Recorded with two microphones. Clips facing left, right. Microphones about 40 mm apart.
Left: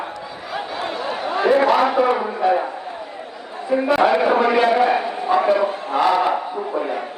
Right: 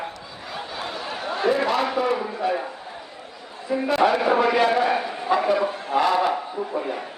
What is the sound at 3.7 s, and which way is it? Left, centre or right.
A man's voice, left.